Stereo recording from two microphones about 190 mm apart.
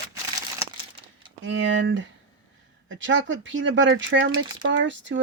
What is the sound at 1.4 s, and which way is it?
Speech, 75° right (ahead or behind).